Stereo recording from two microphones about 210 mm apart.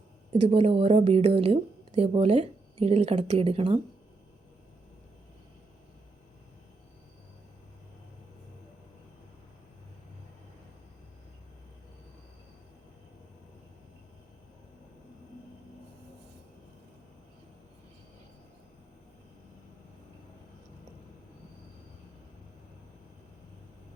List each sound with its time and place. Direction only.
0.4 s speech: 25° right (ahead or behind)